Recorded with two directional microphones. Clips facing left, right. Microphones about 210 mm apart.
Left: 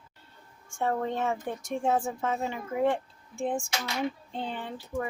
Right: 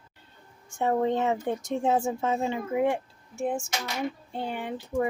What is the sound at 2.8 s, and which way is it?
Speech, 10° right (ahead or behind).